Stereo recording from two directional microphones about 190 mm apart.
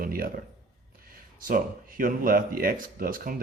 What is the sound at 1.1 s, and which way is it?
Speech, 50° right (ahead or behind).